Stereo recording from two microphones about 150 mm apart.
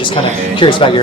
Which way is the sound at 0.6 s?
35° left (ahead or behind).